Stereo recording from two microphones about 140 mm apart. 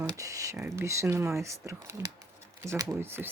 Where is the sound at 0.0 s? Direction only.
25° right (ahead or behind).